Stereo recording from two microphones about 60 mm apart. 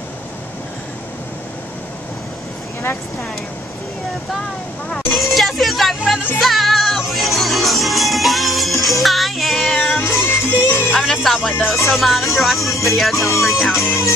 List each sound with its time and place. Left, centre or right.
5.1 s music: centre
10.0 s music: left
11.1 s music: centre